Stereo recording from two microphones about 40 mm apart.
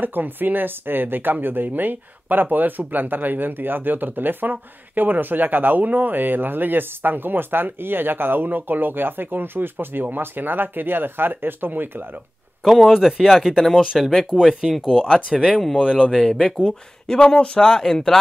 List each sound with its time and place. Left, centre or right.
0.0 s speech: right
12.6 s speech: centre; by 16.1 s right
16.1 s speech: centre